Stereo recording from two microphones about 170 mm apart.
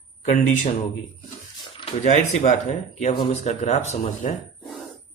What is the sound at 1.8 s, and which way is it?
Speech, 40° left (ahead or behind).